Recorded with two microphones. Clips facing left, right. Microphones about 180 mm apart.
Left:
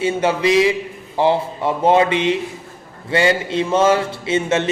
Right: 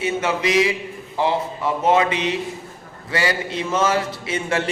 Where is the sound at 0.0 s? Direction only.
30° left (ahead or behind).